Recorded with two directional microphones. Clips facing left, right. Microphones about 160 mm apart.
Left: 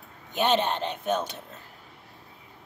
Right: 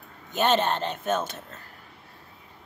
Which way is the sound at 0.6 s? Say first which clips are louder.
Right 1 dB; 15° left (ahead or behind).